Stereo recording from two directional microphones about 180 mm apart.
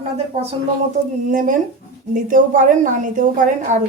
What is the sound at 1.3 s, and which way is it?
A woman's voice, 45° right (ahead or behind).